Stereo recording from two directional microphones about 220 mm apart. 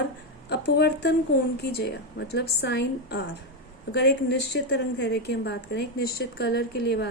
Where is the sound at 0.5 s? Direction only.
50° left (ahead or behind).